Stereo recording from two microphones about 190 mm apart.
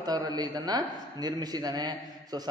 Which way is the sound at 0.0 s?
20° right (ahead or behind).